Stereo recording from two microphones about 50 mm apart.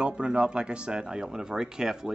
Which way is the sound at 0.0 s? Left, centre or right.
Centre.